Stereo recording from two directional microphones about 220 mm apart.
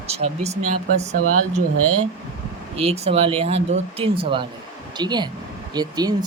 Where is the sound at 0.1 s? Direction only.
30° right (ahead or behind).